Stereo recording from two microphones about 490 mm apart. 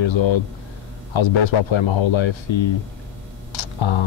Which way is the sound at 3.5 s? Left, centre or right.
Left.